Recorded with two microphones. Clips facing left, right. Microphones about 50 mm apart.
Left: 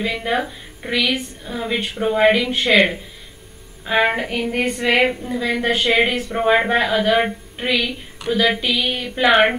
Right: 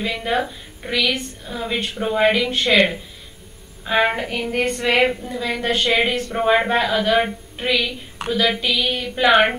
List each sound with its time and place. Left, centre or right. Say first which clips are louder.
0.0 s a woman's voice: left 1 dB; centre